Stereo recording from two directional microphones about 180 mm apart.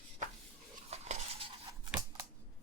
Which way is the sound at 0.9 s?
35° right (ahead or behind).